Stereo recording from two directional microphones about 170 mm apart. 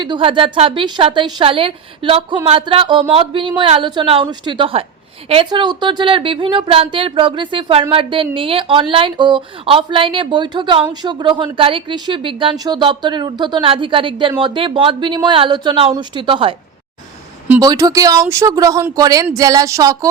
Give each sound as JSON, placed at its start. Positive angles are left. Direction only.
{"t": 0.0, "sound": "a woman's voice", "side_deg": -30}
{"t": 17.6, "sound": "a woman's voice", "side_deg": -20}